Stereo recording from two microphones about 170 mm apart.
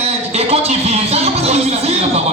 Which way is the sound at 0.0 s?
35° right (ahead or behind).